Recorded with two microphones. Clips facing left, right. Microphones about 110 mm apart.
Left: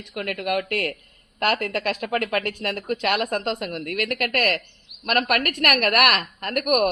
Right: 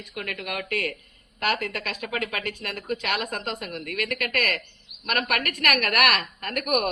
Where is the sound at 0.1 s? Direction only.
60° left (ahead or behind).